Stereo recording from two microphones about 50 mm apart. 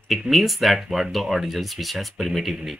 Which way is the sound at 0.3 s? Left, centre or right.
Centre.